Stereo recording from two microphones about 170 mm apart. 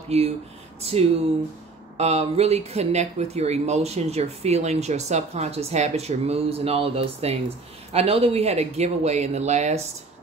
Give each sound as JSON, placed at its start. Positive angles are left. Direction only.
{"t": 0.1, "sound": "speech", "side_deg": -40}